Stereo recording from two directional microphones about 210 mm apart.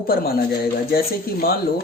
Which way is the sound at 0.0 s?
45° left (ahead or behind).